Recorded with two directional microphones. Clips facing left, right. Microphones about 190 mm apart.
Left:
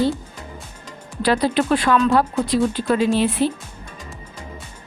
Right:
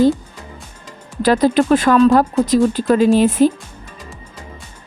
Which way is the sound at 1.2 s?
45° right (ahead or behind).